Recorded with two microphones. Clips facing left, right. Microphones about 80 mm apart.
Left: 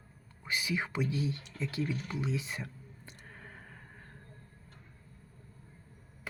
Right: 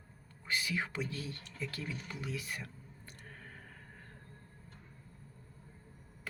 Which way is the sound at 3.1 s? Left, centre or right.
Centre.